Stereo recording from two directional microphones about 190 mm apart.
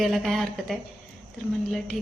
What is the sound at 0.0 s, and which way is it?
A woman's voice, centre (ahead or behind).